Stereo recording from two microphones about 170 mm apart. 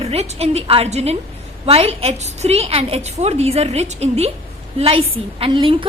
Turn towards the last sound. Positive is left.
turn(degrees=-30)  # may be behind; listen again after turning